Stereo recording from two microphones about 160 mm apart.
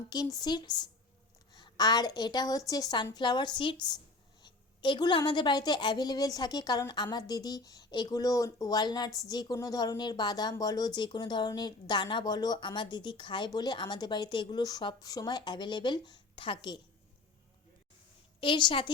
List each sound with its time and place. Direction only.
0.1 s a woman's voice: 25° left (ahead or behind)
18.3 s a woman's voice: 30° left (ahead or behind)